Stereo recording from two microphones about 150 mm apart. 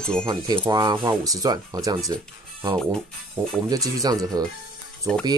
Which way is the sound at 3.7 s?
25° right (ahead or behind).